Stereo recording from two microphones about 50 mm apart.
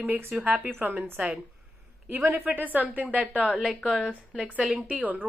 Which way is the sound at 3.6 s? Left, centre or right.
Centre.